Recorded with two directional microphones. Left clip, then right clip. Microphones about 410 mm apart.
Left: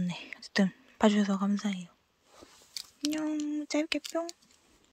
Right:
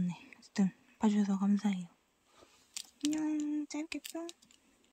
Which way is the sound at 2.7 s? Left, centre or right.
Centre.